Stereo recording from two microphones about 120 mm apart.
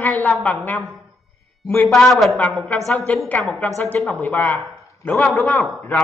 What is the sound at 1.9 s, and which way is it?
A man's voice, centre (ahead or behind).